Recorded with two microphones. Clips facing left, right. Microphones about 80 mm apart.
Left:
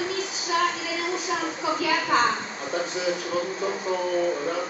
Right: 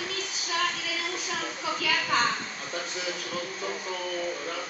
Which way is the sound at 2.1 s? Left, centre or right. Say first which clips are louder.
Left 4 dB; left.